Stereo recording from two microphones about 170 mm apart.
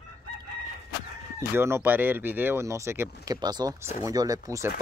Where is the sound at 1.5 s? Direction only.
15° right (ahead or behind).